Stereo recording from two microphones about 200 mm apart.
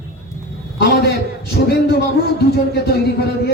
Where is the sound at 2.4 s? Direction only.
55° left (ahead or behind).